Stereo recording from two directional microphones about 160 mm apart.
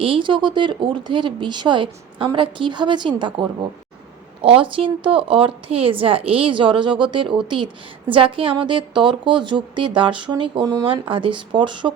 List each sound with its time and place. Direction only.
0.0 s a woman's voice: 30° right (ahead or behind)
4.4 s a woman's voice: 35° right (ahead or behind)